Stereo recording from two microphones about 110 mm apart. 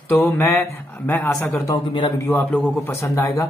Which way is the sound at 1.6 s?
45° left (ahead or behind).